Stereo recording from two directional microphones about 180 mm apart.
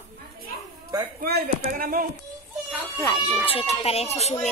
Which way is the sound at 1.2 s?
60° right (ahead or behind).